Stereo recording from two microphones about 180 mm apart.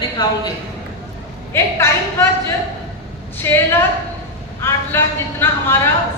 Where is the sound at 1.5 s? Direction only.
15° left (ahead or behind).